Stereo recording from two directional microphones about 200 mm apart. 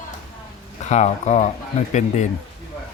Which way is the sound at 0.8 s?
35° left (ahead or behind).